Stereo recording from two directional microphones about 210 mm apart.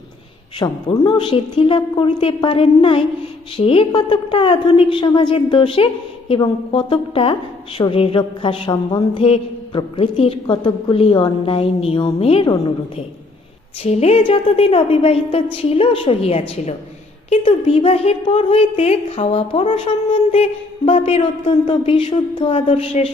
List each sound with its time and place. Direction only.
0.6 s a woman's voice: 20° left (ahead or behind)
13.8 s a woman's voice: 30° left (ahead or behind)